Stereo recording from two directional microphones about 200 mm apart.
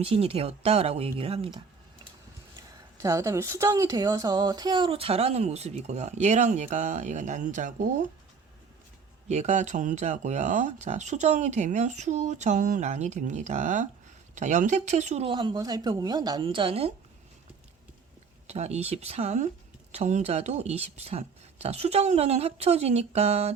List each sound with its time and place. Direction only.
0.0 s a woman's voice: 30° right (ahead or behind)
9.3 s a woman's voice: 35° right (ahead or behind)
18.4 s a woman's voice: 35° right (ahead or behind)